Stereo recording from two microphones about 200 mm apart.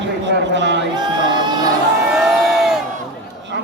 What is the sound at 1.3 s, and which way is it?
Crowd, 20° right (ahead or behind).